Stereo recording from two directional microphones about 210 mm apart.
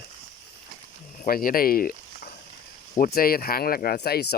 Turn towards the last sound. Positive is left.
turn(degrees=50)  # may be behind; listen again after turning